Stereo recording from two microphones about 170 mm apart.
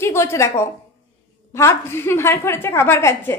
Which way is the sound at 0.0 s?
15° left (ahead or behind).